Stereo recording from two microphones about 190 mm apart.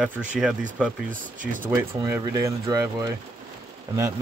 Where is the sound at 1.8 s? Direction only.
10° right (ahead or behind).